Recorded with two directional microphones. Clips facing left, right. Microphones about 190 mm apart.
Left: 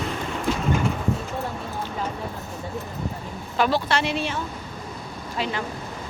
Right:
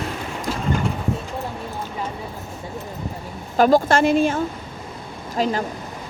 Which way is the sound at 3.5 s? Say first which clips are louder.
Right 7 dB; 45° right (ahead or behind).